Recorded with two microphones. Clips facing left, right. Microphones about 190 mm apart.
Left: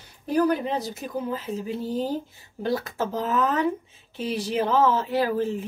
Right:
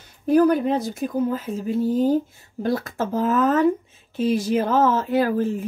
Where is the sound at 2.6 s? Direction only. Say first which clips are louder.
Right 2 dB; 50° right (ahead or behind).